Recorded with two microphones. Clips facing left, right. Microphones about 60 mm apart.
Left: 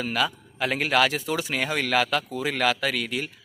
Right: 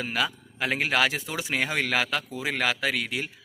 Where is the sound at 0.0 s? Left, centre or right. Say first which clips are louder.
Left 2 dB; right.